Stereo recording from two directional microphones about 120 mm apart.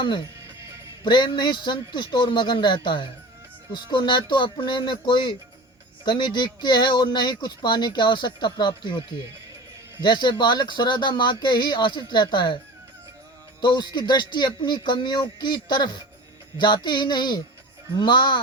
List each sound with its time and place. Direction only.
0.0 s speech: 40° left (ahead or behind)
13.6 s speech: 40° left (ahead or behind)